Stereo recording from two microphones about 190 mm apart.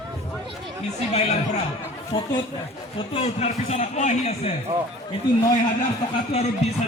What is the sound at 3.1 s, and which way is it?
A man's voice, 35° left (ahead or behind).